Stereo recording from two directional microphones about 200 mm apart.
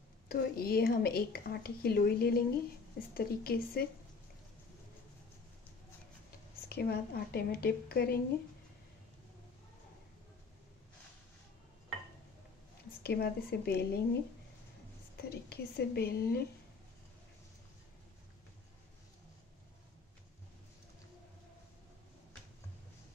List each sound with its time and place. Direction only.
0.3 s speech: 50° left (ahead or behind)
6.7 s speech: 50° left (ahead or behind)
13.0 s speech: 55° left (ahead or behind)
15.1 s speech: 50° left (ahead or behind)